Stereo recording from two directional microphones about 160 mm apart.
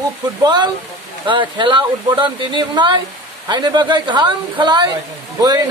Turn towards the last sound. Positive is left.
turn(degrees=-25)  # may be behind; listen again after turning